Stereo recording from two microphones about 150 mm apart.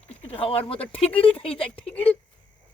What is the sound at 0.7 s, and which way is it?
Speech, 40° left (ahead or behind).